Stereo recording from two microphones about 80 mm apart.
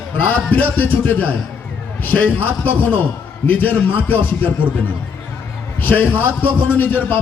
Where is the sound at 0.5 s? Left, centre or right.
Left.